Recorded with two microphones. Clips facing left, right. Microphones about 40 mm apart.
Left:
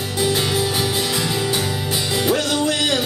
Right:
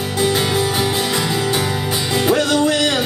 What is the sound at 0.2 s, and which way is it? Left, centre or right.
Music, centre.